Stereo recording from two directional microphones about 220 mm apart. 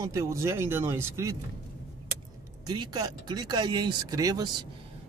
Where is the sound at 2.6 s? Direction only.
20° right (ahead or behind).